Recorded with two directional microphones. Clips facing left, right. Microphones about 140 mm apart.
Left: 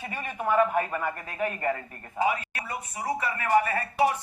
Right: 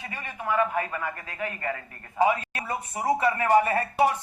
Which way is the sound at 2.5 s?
25° right (ahead or behind).